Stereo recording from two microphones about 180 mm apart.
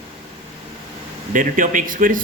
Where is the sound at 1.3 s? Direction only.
45° right (ahead or behind).